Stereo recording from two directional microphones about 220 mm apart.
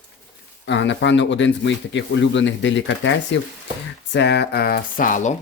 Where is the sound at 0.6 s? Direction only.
55° left (ahead or behind); by 5.3 s 35° left (ahead or behind).